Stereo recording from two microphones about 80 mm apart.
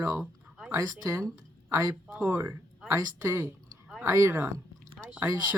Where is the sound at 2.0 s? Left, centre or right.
Centre.